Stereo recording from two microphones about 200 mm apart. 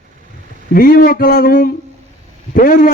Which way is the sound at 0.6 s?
45° left (ahead or behind).